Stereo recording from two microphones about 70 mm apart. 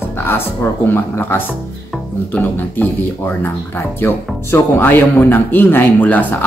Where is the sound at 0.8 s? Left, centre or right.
Left.